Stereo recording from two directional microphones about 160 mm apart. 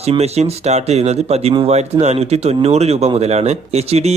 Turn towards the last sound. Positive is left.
turn(degrees=-40)  # may be behind; listen again after turning